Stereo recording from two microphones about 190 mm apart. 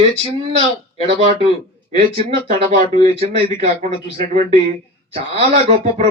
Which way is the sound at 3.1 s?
35° right (ahead or behind).